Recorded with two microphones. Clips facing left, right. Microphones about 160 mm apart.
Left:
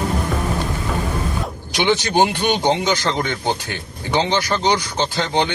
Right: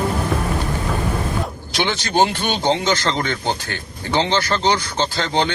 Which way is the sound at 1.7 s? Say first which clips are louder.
Left 2 dB; 15° left (ahead or behind).